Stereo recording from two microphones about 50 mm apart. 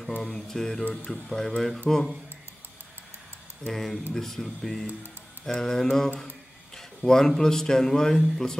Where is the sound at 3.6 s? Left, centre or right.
Centre.